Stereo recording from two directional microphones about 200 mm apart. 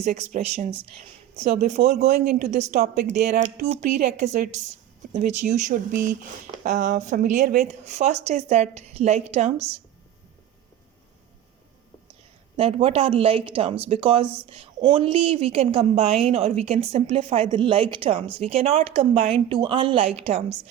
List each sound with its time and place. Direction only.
0.0 s speech: 35° right (ahead or behind)
12.5 s a woman's voice: 30° right (ahead or behind)